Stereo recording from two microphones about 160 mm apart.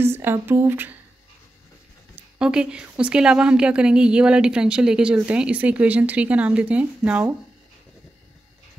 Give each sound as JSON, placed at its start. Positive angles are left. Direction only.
{"t": 0.0, "sound": "speech", "side_deg": -15}
{"t": 2.1, "sound": "a woman's voice", "side_deg": -5}